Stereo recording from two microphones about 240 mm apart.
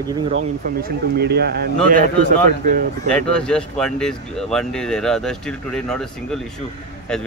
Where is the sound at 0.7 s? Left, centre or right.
Right.